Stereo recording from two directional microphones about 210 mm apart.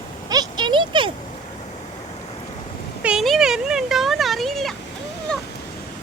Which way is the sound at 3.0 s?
5° right (ahead or behind).